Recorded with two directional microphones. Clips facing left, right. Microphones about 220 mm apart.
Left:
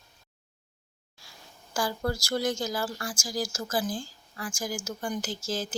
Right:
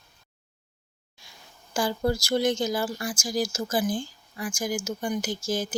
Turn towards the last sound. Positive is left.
turn(degrees=-15)  # may be behind; listen again after turning